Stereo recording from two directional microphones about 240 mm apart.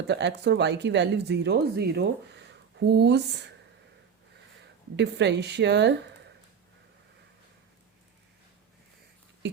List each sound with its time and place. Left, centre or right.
0.1 s speech: right
4.9 s speech: right